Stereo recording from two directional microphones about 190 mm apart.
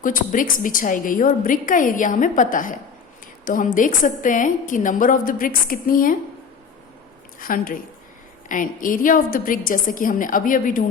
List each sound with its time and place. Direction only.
0.0 s a woman's voice: 45° left (ahead or behind)
7.3 s a woman's voice: 50° left (ahead or behind)